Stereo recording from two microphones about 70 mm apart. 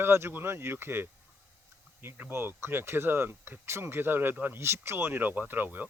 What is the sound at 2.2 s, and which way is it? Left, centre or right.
Speech, right.